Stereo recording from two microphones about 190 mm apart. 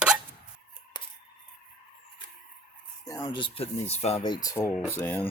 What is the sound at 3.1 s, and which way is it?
Speech, 20° left (ahead or behind).